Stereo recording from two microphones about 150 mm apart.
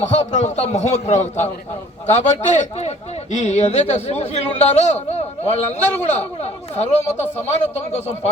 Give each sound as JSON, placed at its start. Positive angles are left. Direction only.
{"t": 0.0, "sound": "speech", "side_deg": 50}